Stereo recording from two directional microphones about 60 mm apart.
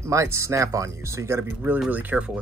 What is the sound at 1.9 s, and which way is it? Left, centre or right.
Speech, right.